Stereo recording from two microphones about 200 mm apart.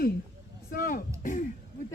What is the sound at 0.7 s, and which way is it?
Speech, 45° left (ahead or behind).